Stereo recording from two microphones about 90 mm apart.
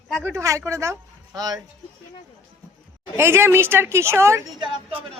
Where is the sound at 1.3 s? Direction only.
45° right (ahead or behind).